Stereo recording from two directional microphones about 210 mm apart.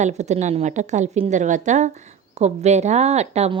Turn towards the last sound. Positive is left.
turn(degrees=-30)  # may be behind; listen again after turning